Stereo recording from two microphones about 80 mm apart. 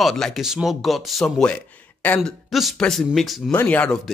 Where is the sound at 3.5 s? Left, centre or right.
Left.